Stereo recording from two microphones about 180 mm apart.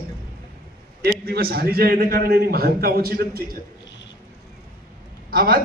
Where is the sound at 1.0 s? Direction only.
60° right (ahead or behind).